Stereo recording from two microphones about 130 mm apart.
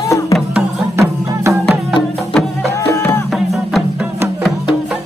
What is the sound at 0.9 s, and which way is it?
Music, 20° right (ahead or behind).